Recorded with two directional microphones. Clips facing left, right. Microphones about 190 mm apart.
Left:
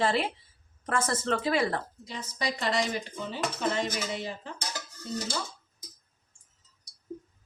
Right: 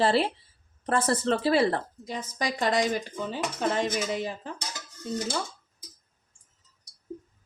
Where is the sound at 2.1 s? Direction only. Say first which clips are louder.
Right 3 dB; 50° right (ahead or behind).